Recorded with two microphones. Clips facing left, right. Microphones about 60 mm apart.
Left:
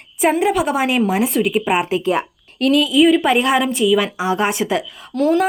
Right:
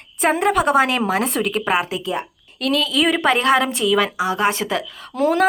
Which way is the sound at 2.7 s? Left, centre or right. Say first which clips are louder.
Left 5 dB; left.